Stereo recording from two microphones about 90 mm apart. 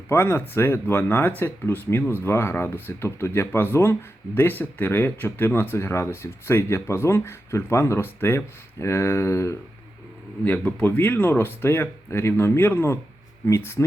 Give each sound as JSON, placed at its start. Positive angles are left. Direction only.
{"t": 0.1, "sound": "speech", "side_deg": 30}
{"t": 10.4, "sound": "speech", "side_deg": 20}